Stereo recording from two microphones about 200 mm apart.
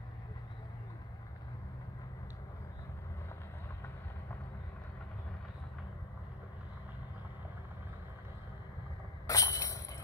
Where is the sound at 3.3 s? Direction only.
15° left (ahead or behind).